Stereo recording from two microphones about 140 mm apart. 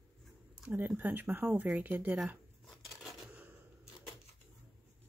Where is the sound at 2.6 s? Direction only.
Centre (ahead or behind).